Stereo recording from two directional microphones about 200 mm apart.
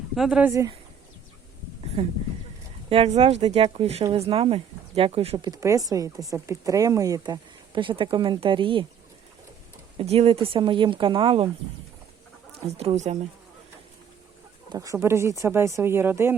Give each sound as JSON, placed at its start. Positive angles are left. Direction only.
{"t": 0.2, "sound": "speech", "side_deg": -5}
{"t": 0.5, "sound": "speech", "side_deg": -15}
{"t": 2.0, "sound": "speech", "side_deg": -30}
{"t": 5.5, "sound": "speech", "side_deg": -15}
{"t": 10.0, "sound": "speech", "side_deg": -30}
{"t": 12.7, "sound": "speech", "side_deg": -30}
{"t": 14.7, "sound": "speech", "side_deg": -15}